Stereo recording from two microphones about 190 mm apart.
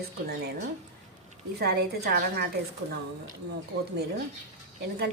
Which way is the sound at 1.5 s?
55° right (ahead or behind).